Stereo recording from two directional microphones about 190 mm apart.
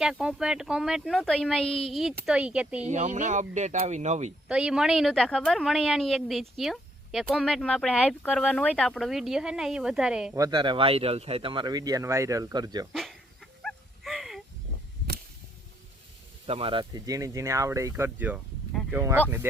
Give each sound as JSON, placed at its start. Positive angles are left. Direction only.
{"t": 0.0, "sound": "speech", "side_deg": -5}
{"t": 2.8, "sound": "speech", "side_deg": -40}
{"t": 4.4, "sound": "speech", "side_deg": -5}
{"t": 10.3, "sound": "speech", "side_deg": -20}
{"t": 12.9, "sound": "dog", "side_deg": 0}
{"t": 16.5, "sound": "speech", "side_deg": -30}
{"t": 18.7, "sound": "a sound", "side_deg": 0}
{"t": 18.9, "sound": "speech", "side_deg": -10}